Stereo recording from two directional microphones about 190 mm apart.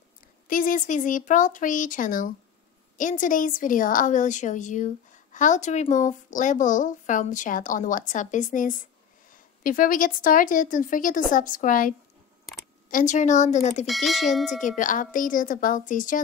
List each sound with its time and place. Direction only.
0.5 s a woman's voice: 45° left (ahead or behind)
12.9 s speech: 40° left (ahead or behind)
13.8 s speech: centre (ahead or behind)
14.6 s a woman's voice: 45° left (ahead or behind)